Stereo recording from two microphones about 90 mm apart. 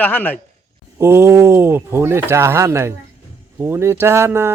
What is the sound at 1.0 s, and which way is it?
Speech, 30° right (ahead or behind).